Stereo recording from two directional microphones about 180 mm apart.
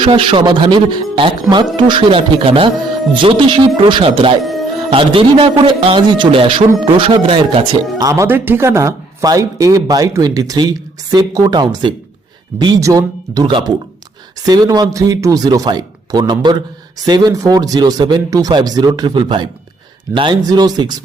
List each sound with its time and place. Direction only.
0.0 s speech: 30° right (ahead or behind)